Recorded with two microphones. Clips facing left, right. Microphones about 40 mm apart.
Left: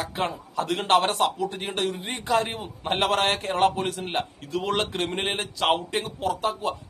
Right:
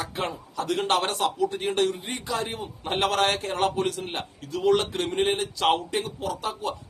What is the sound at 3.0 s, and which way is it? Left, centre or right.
A man's voice, left.